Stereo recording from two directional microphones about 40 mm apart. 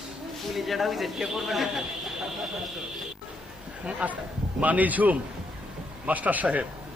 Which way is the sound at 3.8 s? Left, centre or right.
Right.